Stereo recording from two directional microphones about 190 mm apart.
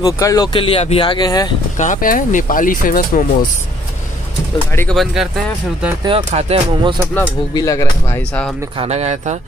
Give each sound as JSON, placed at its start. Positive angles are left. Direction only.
{"t": 0.0, "sound": "speech", "side_deg": 20}
{"t": 1.8, "sound": "speech", "side_deg": 45}
{"t": 4.7, "sound": "speech", "side_deg": 5}
{"t": 6.0, "sound": "speech", "side_deg": -30}
{"t": 7.2, "sound": "speech", "side_deg": 15}
{"t": 8.3, "sound": "speech", "side_deg": 5}
{"t": 8.7, "sound": "speech", "side_deg": -35}